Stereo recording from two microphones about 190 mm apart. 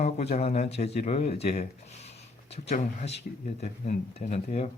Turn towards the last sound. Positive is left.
turn(degrees=35)  # may be behind; listen again after turning